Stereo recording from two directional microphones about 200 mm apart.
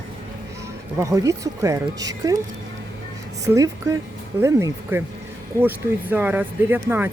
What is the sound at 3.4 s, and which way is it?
Speech, 15° right (ahead or behind).